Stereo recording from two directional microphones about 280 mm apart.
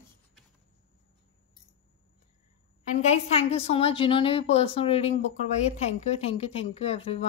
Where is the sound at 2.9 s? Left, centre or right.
Left.